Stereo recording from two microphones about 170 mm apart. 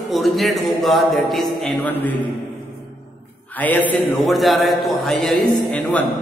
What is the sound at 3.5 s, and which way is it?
A man's voice, 10° left (ahead or behind).